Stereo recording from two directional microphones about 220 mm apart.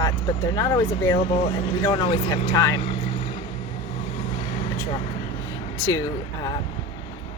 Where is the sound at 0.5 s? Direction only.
15° left (ahead or behind).